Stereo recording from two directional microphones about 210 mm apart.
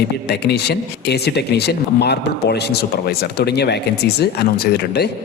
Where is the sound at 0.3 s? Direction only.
50° left (ahead or behind).